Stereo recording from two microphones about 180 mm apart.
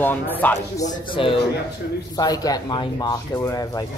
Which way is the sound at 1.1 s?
30° left (ahead or behind).